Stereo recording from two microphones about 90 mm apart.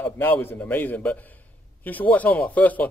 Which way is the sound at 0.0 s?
25° left (ahead or behind).